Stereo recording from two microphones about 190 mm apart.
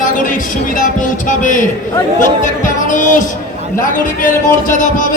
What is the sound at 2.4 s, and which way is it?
Speech, 45° left (ahead or behind).